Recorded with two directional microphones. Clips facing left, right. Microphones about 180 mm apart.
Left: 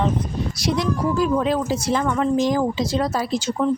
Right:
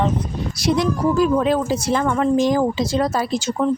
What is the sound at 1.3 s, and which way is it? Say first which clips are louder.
A woman's voice: right 2 dB; 55° right (ahead or behind).